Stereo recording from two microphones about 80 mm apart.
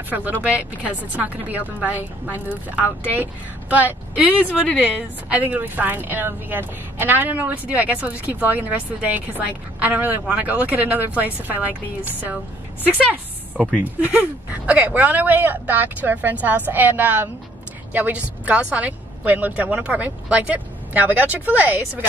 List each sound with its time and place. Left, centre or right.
0.1 s a woman's voice: centre
13.7 s a woman's voice: right